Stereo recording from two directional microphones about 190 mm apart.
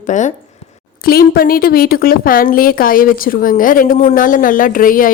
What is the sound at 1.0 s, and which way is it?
A woman's voice, 55° left (ahead or behind).